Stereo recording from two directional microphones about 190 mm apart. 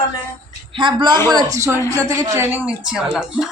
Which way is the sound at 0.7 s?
25° right (ahead or behind).